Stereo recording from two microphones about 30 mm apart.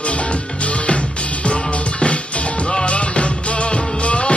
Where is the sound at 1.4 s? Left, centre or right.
Left.